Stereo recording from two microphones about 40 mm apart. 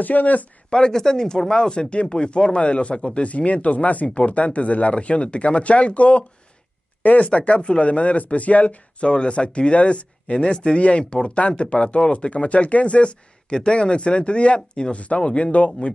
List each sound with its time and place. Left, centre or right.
0.0 s speech: left
0.7 s speech: left
3.3 s speech: left
7.2 s speech: left
9.0 s speech: left